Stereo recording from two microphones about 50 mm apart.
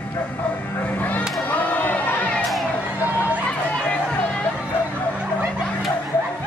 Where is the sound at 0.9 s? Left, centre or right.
Left.